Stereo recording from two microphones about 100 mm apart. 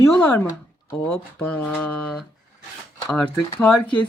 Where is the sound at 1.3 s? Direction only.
15° left (ahead or behind).